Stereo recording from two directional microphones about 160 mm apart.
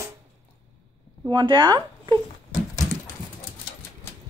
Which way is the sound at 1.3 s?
30° right (ahead or behind).